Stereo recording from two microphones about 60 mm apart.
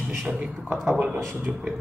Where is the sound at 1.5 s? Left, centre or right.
Centre.